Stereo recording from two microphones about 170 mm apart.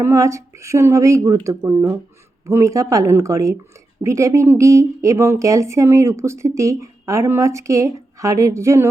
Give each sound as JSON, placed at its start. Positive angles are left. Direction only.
{"t": 0.0, "sound": "speech", "side_deg": -20}